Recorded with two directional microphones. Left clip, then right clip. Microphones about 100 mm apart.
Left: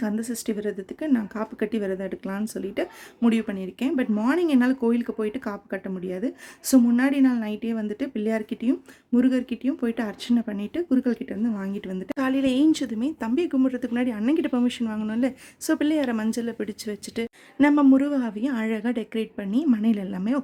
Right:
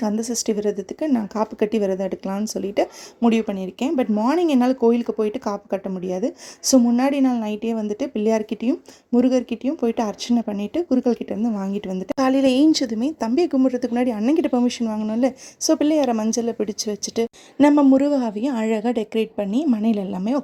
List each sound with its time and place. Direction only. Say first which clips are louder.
0.0 s speech: right 6 dB; 30° right (ahead or behind)
6.7 s speech: right 2 dB; 10° right (ahead or behind)
7.0 s speech: right 2 dB; 20° right (ahead or behind)
12.0 s a woman's voice: right 6 dB; 35° right (ahead or behind); by 20.4 s 20° right (ahead or behind)